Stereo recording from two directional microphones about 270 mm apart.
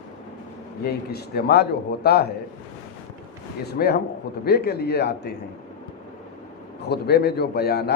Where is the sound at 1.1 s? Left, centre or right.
Left.